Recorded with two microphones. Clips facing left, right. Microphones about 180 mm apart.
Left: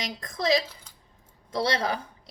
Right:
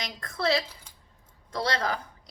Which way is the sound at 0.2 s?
20° left (ahead or behind).